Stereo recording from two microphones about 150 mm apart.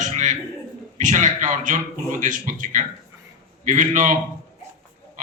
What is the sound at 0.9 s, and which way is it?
A man's voice, 55° right (ahead or behind).